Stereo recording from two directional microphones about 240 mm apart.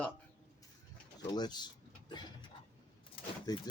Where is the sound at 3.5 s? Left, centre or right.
Centre.